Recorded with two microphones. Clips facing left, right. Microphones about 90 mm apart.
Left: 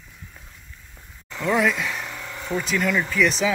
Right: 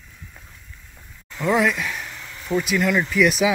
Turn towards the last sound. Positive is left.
turn(degrees=-5)  # may be behind; listen again after turning